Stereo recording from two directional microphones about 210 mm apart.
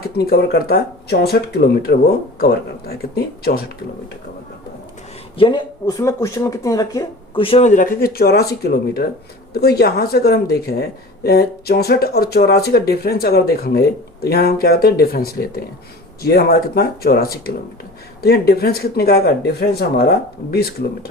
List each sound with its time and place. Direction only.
0.0 s speech: 50° left (ahead or behind)
5.4 s speech: 20° left (ahead or behind); by 21.1 s 45° left (ahead or behind)